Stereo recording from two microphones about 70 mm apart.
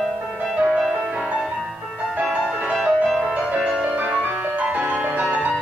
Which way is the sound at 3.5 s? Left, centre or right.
Centre.